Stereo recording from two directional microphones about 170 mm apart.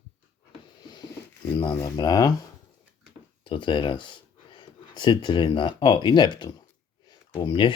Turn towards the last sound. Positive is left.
turn(degrees=30)  # may be behind; listen again after turning